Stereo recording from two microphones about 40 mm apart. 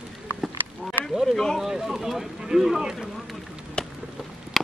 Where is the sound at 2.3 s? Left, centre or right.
Centre.